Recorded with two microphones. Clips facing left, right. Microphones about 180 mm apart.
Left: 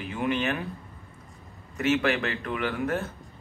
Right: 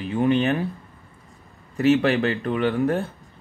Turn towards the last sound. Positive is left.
turn(degrees=-30)  # may be behind; listen again after turning